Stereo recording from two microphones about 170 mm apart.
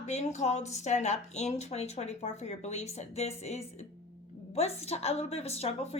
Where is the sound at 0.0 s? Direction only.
40° left (ahead or behind).